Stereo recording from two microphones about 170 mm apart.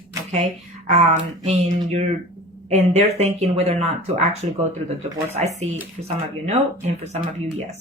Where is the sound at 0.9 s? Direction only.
40° right (ahead or behind).